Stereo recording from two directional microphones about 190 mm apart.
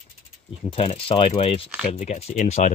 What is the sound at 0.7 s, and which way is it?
Speech, 30° left (ahead or behind).